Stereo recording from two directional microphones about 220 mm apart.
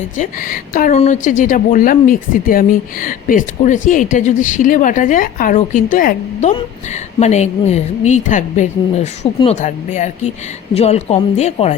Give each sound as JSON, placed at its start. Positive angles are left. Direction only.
{"t": 0.2, "sound": "a woman's voice", "side_deg": 40}